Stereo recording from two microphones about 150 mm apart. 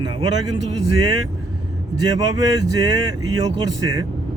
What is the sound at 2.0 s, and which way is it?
Speech, 25° right (ahead or behind).